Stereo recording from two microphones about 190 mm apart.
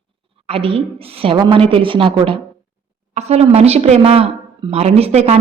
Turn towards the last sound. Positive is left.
turn(degrees=-35)  # may be behind; listen again after turning